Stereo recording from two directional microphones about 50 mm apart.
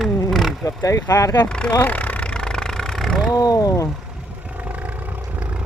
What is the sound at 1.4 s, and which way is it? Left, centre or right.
Speech, centre.